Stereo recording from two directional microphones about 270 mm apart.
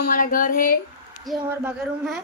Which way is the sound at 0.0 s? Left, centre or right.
Left.